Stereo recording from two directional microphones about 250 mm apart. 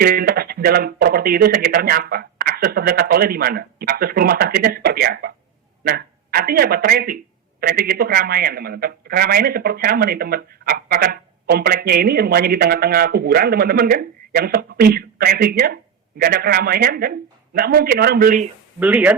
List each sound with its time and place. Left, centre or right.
0.0 s a man's voice: right
18.8 s speech: centre